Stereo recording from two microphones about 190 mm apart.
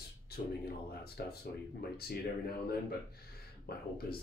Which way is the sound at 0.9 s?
55° left (ahead or behind).